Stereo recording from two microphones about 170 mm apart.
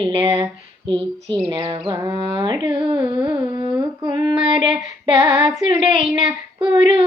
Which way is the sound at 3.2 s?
25° right (ahead or behind).